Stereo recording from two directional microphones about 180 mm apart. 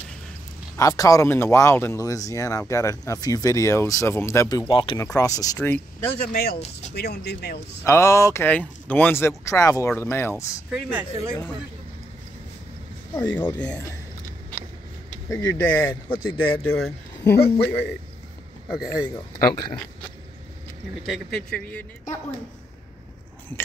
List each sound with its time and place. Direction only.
0.7 s speech: 20° left (ahead or behind)
6.3 s speech: 60° left (ahead or behind)
7.8 s speech: 15° left (ahead or behind)
10.7 s speech: 5° right (ahead or behind)
13.1 s speech: 10° left (ahead or behind)
15.2 s speech: 20° left (ahead or behind)
16.4 s speech: 15° left (ahead or behind)
19.3 s speech: 20° left (ahead or behind)
21.0 s speech: 5° left (ahead or behind)